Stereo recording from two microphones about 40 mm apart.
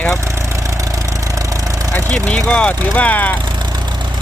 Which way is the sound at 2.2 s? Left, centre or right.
Left.